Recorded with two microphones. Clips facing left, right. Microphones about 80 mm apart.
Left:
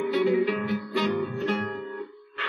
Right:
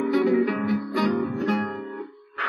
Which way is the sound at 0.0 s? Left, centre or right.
Right.